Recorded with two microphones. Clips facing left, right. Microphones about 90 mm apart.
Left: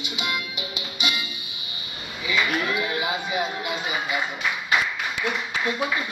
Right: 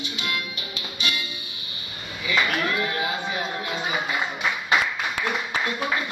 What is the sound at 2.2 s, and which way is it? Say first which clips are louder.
Cattle: even; 15° left (ahead or behind).